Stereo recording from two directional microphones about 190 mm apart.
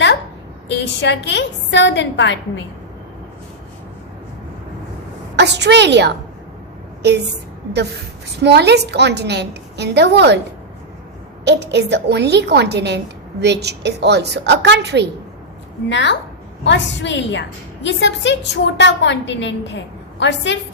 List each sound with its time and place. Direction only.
0.7 s a woman's voice: 65° left (ahead or behind)
5.4 s a woman's voice: 65° right (ahead or behind)
8.4 s a woman's voice: 60° right (ahead or behind)
11.4 s a woman's voice: 65° right (ahead or behind)
15.9 s a woman's voice: 70° left (ahead or behind)